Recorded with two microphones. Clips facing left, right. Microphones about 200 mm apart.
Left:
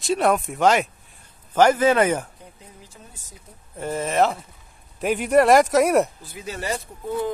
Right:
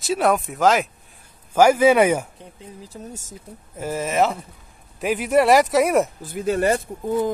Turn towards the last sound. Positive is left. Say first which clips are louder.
# right 4 dB
turn(degrees=-50)  # may be behind; listen again after turning